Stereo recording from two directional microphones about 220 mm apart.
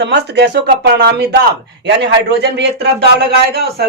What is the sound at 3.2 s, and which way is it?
Speech, 45° right (ahead or behind).